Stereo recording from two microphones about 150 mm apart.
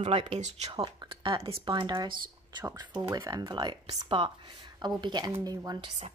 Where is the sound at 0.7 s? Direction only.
35° right (ahead or behind).